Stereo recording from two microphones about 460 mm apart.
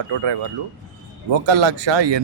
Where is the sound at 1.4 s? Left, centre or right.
Right.